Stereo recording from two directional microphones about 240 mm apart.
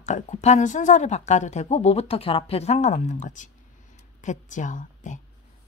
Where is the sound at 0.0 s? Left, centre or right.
Left.